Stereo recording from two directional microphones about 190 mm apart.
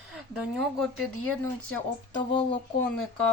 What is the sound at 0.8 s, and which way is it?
Speech, 10° left (ahead or behind).